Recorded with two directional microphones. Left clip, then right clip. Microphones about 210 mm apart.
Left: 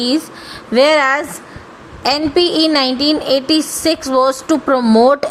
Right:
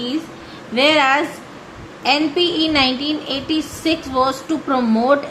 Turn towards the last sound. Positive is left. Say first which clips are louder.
# left 5 dB
turn(degrees=50)  # may be behind; listen again after turning